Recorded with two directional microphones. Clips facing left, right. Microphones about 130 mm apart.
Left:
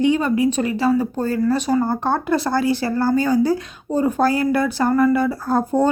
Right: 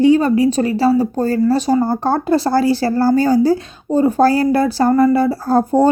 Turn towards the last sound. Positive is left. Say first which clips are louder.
# right 5 dB
turn(degrees=-35)  # may be behind; listen again after turning